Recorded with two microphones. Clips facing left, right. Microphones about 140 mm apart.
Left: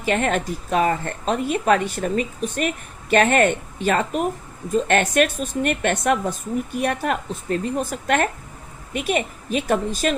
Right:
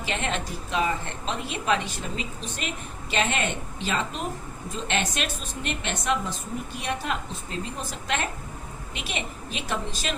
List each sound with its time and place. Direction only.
0.0 s a woman's voice: 45° left (ahead or behind)